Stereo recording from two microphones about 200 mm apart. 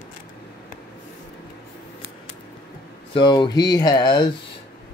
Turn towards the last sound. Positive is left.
turn(degrees=20)  # may be behind; listen again after turning